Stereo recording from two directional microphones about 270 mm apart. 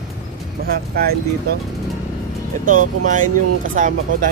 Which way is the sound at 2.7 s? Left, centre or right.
Right.